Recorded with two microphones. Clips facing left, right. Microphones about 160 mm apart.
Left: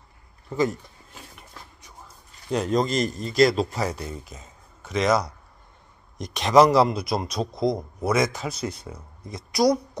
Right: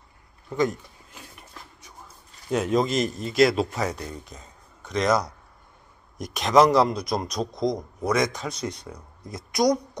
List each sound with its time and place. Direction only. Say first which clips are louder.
0.5 s speech: even; centre (ahead or behind)
2.5 s a man's voice: even; 5° right (ahead or behind)